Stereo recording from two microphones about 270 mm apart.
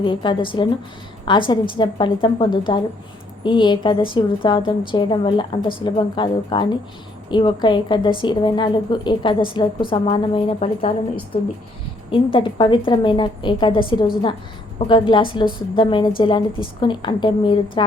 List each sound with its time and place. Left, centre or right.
0.0 s a woman's voice: centre